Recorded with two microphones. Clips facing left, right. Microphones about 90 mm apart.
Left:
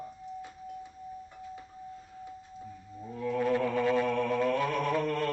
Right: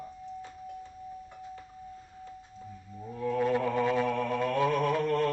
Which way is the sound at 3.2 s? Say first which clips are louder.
Right 1 dB; 15° right (ahead or behind).